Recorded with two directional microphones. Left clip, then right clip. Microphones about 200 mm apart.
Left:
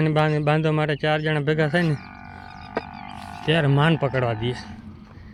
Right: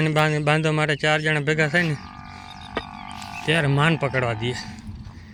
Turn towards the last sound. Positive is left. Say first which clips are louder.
# even
turn(degrees=15)  # may be behind; listen again after turning